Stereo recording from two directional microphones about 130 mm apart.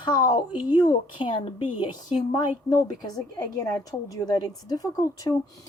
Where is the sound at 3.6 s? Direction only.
25° left (ahead or behind).